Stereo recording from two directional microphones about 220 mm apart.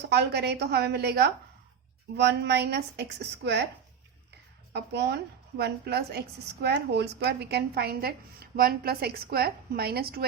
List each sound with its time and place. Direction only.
0.1 s a woman's voice: 50° right (ahead or behind)
4.7 s a woman's voice: 50° right (ahead or behind)